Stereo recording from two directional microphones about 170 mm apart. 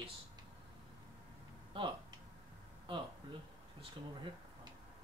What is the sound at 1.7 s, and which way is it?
Speech, 30° right (ahead or behind).